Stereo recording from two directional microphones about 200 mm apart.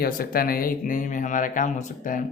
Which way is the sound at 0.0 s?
45° left (ahead or behind).